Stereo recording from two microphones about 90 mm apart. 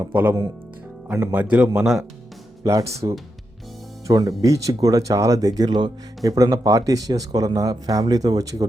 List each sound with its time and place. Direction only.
0.0 s a man's voice: 20° right (ahead or behind); by 2.0 s 5° right (ahead or behind)
2.6 s speech: 35° right (ahead or behind)